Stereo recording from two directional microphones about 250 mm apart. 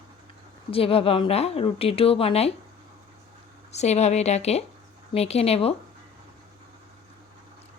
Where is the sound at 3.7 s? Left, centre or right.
Left.